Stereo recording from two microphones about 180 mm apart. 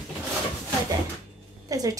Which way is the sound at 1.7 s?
20° right (ahead or behind).